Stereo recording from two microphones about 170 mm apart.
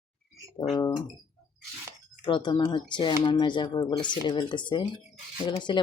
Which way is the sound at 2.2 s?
25° left (ahead or behind).